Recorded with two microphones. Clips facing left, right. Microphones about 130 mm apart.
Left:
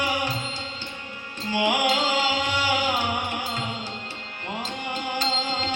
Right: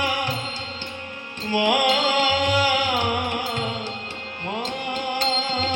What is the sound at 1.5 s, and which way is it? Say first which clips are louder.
Music: right 3 dB; 50° right (ahead or behind).